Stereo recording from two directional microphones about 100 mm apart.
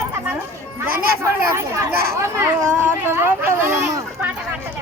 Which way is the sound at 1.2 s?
30° right (ahead or behind).